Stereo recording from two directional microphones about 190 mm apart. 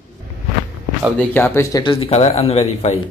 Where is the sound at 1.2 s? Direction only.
10° left (ahead or behind); by 2.9 s 35° left (ahead or behind).